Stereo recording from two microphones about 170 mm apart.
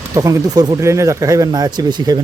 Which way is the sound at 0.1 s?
20° right (ahead or behind).